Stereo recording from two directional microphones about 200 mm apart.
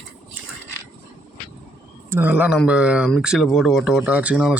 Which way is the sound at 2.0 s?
10° right (ahead or behind).